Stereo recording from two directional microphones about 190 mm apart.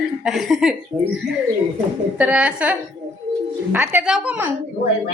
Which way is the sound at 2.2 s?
5° right (ahead or behind).